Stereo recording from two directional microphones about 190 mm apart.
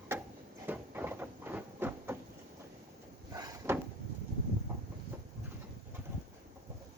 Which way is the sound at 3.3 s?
20° right (ahead or behind).